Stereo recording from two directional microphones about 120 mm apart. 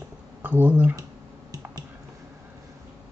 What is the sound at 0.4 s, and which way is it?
Speech, 15° right (ahead or behind).